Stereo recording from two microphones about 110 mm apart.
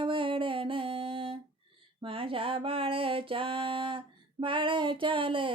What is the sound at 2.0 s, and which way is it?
Music, 55° right (ahead or behind).